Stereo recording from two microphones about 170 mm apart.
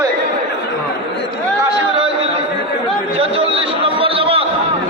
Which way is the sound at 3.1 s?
35° right (ahead or behind).